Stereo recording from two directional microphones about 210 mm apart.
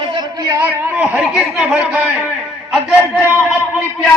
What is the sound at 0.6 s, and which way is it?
A man's voice, 10° right (ahead or behind).